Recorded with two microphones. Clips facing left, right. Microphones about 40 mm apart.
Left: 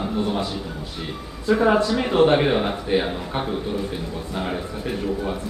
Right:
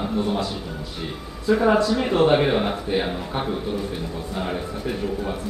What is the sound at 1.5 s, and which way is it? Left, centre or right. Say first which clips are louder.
A man's voice: even; centre.